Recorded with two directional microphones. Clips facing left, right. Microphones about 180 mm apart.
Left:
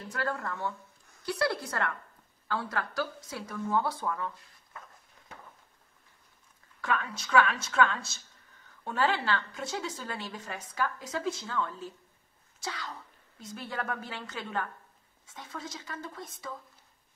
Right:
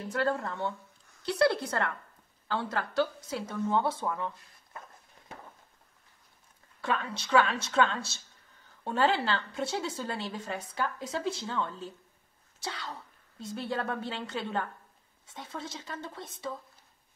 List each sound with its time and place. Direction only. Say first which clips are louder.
0.1 s a woman's voice: right 4 dB; 25° right (ahead or behind)
6.8 s a woman's voice: even; 30° right (ahead or behind)
13.4 s a woman's voice: right 4 dB; 30° right (ahead or behind)